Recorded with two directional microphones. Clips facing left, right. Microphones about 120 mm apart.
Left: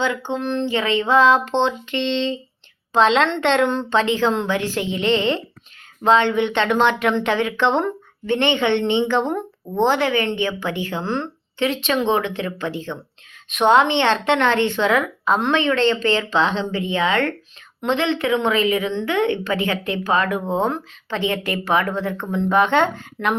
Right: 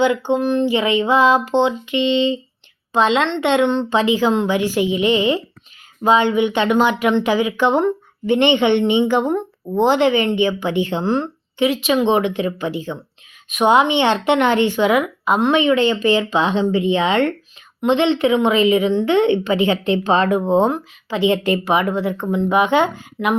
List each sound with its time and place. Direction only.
0.0 s a woman's voice: 15° right (ahead or behind)